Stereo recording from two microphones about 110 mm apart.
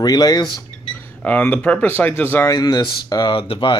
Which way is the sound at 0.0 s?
35° left (ahead or behind).